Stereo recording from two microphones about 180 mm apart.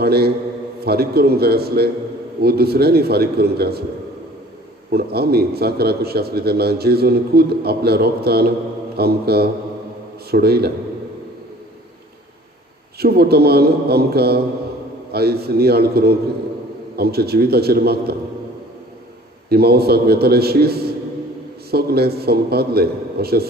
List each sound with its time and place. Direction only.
0.0 s a man's voice: 60° right (ahead or behind)
4.9 s a man's voice: 60° right (ahead or behind)
13.0 s a man's voice: 60° right (ahead or behind)
19.5 s a man's voice: 60° right (ahead or behind)